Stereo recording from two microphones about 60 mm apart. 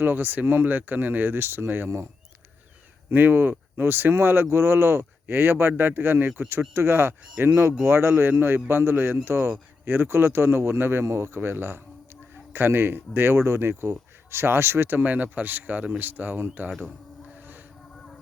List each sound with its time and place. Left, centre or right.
0.0 s speech: right
3.1 s speech: right
11.0 s speech: right
11.3 s speech: right